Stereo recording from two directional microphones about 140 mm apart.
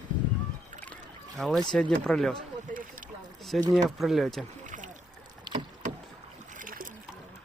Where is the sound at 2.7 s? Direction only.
75° right (ahead or behind).